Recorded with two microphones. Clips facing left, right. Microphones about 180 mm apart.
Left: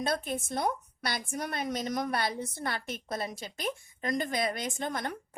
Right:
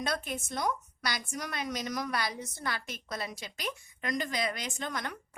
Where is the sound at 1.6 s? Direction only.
25° left (ahead or behind).